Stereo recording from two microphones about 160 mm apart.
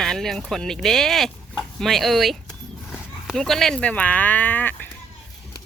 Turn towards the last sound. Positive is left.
turn(degrees=10)  # may be behind; listen again after turning